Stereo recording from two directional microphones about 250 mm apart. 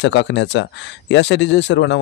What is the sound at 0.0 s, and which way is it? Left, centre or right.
Speech, left.